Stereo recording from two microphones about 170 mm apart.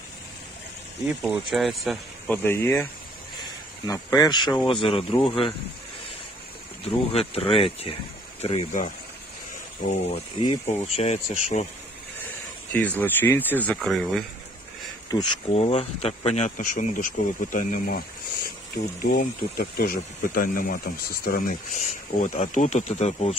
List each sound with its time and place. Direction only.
1.5 s a man's voice: centre (ahead or behind)
2.3 s speech: 15° left (ahead or behind); by 5.5 s 30° left (ahead or behind)
6.8 s speech: 35° left (ahead or behind)
12.7 s a man's voice: 10° left (ahead or behind)
15.0 s speech: 20° left (ahead or behind)
15.5 s speech: 35° left (ahead or behind); by 18.0 s 55° left (ahead or behind)
19.1 s speech: 60° left (ahead or behind)
21.7 s speech: 45° left (ahead or behind)